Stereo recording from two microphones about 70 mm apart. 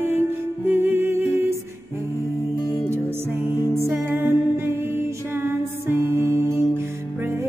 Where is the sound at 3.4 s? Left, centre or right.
Right.